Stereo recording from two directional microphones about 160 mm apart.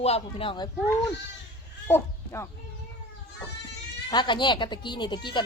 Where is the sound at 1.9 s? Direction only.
15° left (ahead or behind).